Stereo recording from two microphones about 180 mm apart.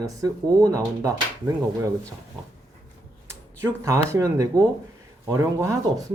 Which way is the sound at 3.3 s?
15° right (ahead or behind).